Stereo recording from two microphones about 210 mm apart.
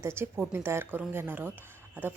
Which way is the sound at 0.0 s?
10° right (ahead or behind).